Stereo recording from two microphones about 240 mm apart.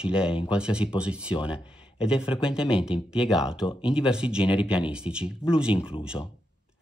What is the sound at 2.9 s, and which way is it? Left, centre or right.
Speech, left.